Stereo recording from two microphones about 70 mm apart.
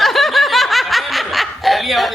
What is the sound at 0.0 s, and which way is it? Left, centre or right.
Snicker, centre.